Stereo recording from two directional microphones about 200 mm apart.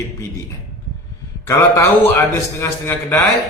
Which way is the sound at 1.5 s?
15° left (ahead or behind).